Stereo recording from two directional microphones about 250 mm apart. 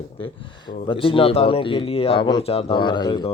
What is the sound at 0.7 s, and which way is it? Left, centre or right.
Speech, left.